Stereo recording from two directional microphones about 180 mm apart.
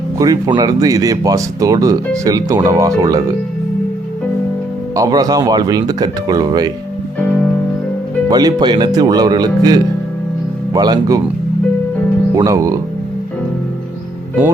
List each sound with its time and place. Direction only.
0.2 s speech: 20° right (ahead or behind)
4.9 s speech: 20° right (ahead or behind)
8.3 s speech: 20° right (ahead or behind)
12.4 s speech: 20° right (ahead or behind)